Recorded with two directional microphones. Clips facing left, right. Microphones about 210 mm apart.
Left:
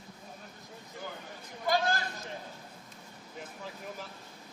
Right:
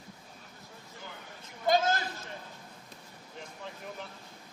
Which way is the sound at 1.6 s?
20° right (ahead or behind).